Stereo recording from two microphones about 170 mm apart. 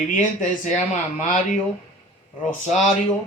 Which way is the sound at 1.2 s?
45° left (ahead or behind).